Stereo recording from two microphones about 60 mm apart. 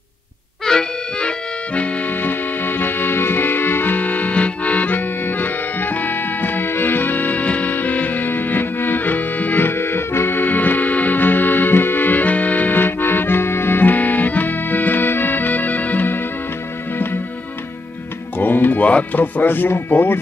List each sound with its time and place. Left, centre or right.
0.7 s accordion: centre
1.7 s music: left
18.4 s music: left